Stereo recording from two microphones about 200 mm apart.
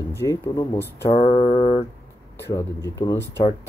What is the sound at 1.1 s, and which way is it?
Mantra, 25° left (ahead or behind).